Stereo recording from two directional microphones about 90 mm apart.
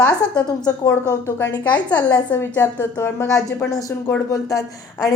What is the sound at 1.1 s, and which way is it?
Speech, 35° left (ahead or behind).